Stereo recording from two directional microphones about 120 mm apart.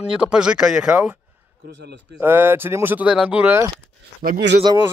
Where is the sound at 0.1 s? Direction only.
5° right (ahead or behind).